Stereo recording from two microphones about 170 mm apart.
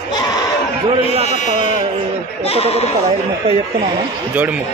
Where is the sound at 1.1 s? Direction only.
45° left (ahead or behind).